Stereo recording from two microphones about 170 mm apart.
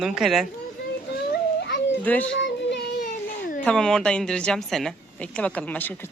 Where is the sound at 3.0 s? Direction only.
50° left (ahead or behind).